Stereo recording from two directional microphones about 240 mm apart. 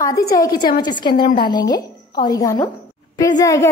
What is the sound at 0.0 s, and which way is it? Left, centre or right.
A woman's voice, centre.